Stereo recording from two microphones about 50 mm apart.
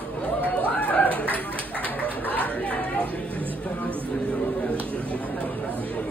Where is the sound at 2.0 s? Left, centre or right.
Left.